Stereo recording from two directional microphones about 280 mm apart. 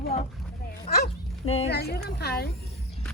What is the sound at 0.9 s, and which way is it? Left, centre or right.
Dog, left.